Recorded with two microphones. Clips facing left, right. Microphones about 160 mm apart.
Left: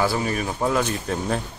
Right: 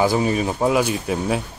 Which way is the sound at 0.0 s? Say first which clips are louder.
Right 5 dB; 20° right (ahead or behind).